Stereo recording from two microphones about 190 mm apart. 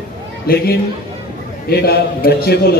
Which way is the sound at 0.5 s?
50° left (ahead or behind).